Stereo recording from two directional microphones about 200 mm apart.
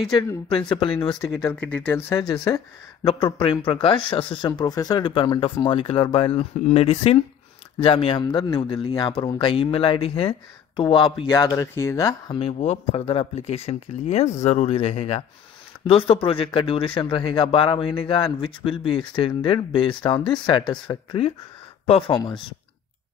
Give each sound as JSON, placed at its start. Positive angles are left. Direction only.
{"t": 0.1, "sound": "speech", "side_deg": 20}
{"t": 12.4, "sound": "speech", "side_deg": 30}